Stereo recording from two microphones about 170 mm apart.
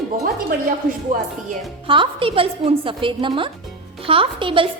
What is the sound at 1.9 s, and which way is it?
A woman's voice, 30° right (ahead or behind).